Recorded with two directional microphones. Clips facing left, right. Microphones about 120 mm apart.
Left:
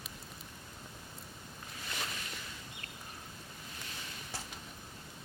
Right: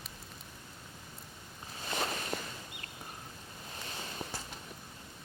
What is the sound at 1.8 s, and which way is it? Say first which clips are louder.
Walk: right 7 dB; 35° right (ahead or behind).